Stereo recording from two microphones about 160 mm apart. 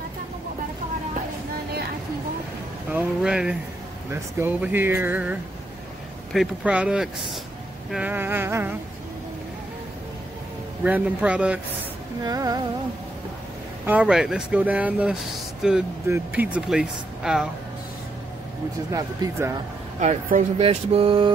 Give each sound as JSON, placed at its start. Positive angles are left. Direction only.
{"t": 2.9, "sound": "speech", "side_deg": -10}
{"t": 10.8, "sound": "speech", "side_deg": -10}
{"t": 12.2, "sound": "speech", "side_deg": -25}
{"t": 13.8, "sound": "speech", "side_deg": -5}
{"t": 18.9, "sound": "speech", "side_deg": -20}
{"t": 20.0, "sound": "speech", "side_deg": -50}